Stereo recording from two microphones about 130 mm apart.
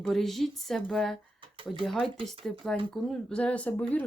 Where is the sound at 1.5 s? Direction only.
45° right (ahead or behind).